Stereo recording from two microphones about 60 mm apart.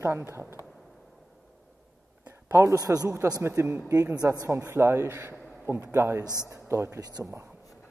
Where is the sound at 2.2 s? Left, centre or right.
Right.